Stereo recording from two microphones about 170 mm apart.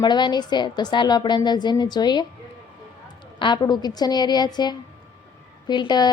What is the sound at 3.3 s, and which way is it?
Speech, 25° left (ahead or behind).